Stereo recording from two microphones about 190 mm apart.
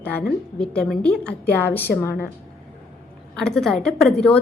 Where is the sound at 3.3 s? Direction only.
5° left (ahead or behind).